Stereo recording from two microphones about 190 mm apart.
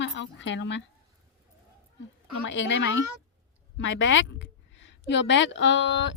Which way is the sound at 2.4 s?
75° left (ahead or behind).